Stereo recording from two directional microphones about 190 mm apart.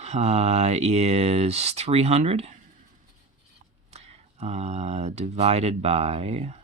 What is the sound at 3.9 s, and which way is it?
Speech, 35° right (ahead or behind).